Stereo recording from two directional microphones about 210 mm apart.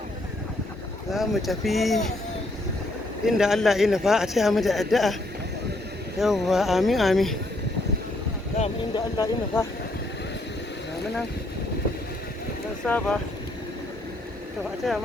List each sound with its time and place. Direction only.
1.1 s speech: centre (ahead or behind)
3.2 s speech: centre (ahead or behind)
6.1 s speech: centre (ahead or behind)
9.0 s speech: 15° left (ahead or behind)
12.8 s speech: 5° left (ahead or behind)
14.8 s speech: centre (ahead or behind)